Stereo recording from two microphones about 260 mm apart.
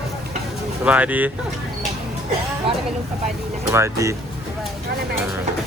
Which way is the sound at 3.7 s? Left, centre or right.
Centre.